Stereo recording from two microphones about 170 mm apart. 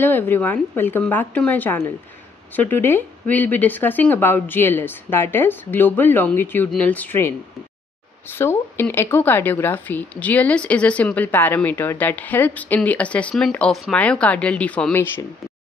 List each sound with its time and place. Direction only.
0.0 s speech: 10° left (ahead or behind)